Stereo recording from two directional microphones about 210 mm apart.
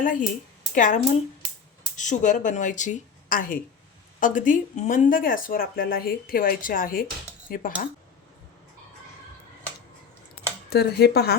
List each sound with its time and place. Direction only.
0.0 s speech: 40° left (ahead or behind)
10.7 s speech: 50° left (ahead or behind)